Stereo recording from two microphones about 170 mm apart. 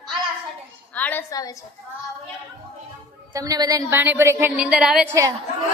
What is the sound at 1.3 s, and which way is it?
Speech, 20° left (ahead or behind).